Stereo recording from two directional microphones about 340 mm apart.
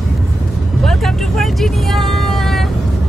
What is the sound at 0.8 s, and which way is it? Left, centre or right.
Vehicle, centre.